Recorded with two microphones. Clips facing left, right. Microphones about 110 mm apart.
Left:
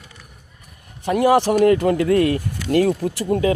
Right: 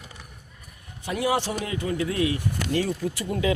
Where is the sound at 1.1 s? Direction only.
55° left (ahead or behind).